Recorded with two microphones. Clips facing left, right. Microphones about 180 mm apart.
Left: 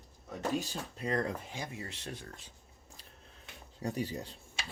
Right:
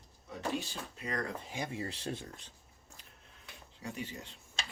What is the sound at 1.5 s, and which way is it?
Speech, 25° right (ahead or behind).